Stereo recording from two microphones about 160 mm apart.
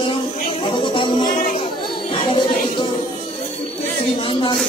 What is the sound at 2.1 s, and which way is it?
Music, 35° left (ahead or behind).